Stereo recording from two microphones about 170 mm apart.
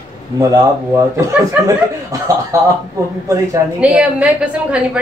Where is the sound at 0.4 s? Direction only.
20° right (ahead or behind).